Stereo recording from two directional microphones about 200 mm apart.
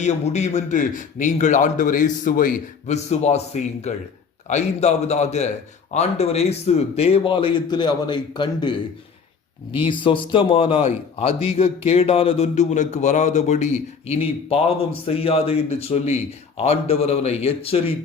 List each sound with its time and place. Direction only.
0.0 s a man's voice: 35° left (ahead or behind)
9.7 s a man's voice: 25° left (ahead or behind)